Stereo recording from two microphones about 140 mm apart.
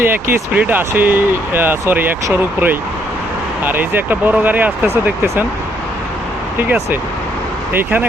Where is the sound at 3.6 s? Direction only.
15° right (ahead or behind).